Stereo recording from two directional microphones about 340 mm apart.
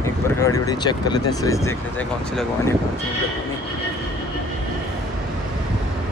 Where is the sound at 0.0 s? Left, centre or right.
Centre.